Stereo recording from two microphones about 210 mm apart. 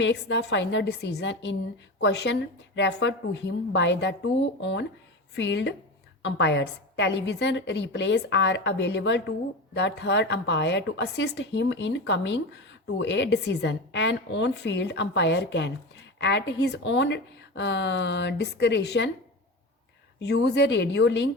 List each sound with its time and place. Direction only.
0.0 s a woman's voice: 55° left (ahead or behind)
20.1 s a woman's voice: 55° left (ahead or behind)